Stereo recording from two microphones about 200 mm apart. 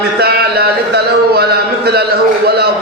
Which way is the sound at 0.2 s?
50° right (ahead or behind).